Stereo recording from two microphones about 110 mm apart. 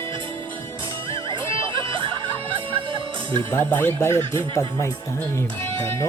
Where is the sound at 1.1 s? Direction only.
50° right (ahead or behind).